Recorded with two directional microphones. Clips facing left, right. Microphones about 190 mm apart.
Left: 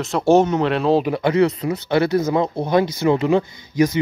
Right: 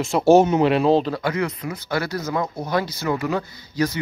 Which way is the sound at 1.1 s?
25° left (ahead or behind).